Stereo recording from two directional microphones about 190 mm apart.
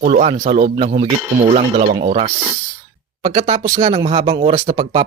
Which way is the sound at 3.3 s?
35° right (ahead or behind).